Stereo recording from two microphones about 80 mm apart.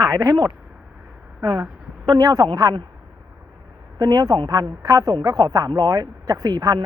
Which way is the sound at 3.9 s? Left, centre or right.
Right.